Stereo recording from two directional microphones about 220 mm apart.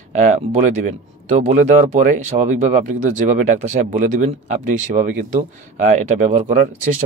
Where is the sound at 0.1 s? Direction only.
35° right (ahead or behind).